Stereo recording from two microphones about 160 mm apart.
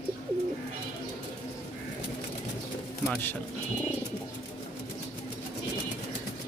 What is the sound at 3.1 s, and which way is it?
Speech, 10° left (ahead or behind).